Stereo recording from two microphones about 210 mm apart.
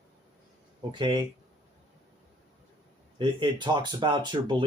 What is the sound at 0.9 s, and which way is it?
Speech, 20° right (ahead or behind).